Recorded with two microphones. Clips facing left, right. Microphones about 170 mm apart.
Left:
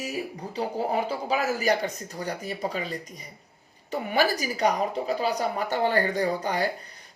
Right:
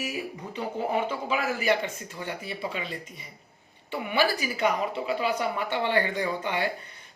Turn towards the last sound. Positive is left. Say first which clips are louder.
# left 3 dB
turn(degrees=40)  # may be behind; listen again after turning